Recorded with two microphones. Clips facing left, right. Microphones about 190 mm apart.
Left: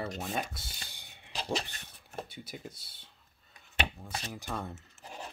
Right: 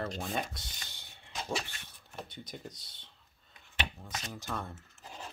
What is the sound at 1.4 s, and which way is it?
Dog, 35° left (ahead or behind).